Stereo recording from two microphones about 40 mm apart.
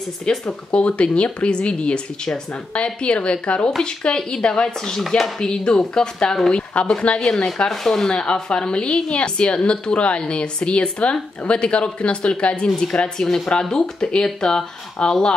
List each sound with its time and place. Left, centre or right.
0.3 s a woman's voice: left
4.9 s speech: centre
5.4 s speech: centre
6.5 s speech: left
7.2 s a woman's voice: centre
8.1 s a woman's voice: left